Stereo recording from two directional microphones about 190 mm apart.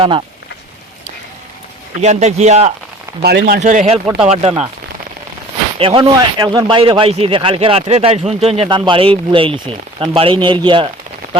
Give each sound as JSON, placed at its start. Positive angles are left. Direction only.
{"t": 2.0, "sound": "speech", "side_deg": -35}
{"t": 3.2, "sound": "speech", "side_deg": -55}
{"t": 5.8, "sound": "a man's voice", "side_deg": -25}